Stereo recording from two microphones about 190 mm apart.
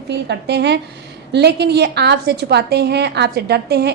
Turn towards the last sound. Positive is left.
turn(degrees=-60)  # may be behind; listen again after turning